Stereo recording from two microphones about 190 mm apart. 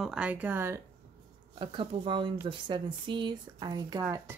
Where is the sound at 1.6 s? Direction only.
25° right (ahead or behind).